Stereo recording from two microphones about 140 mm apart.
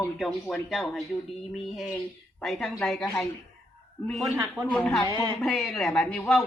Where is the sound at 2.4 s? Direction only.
Centre (ahead or behind).